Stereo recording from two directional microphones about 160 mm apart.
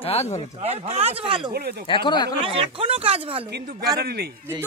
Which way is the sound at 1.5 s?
80° right.